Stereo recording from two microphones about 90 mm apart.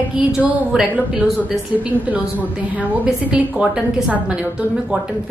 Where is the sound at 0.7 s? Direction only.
5° right (ahead or behind).